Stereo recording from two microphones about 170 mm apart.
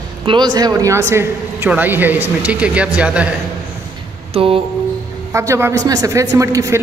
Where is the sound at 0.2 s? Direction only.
25° right (ahead or behind); by 3.3 s 5° right (ahead or behind).